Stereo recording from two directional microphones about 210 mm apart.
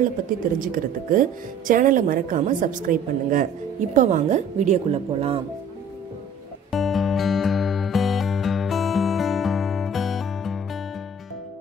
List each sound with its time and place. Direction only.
0.6 s a woman's voice: 40° right (ahead or behind)
6.7 s music: centre (ahead or behind)